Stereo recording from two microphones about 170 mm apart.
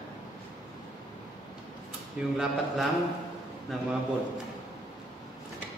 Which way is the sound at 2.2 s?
5° right (ahead or behind).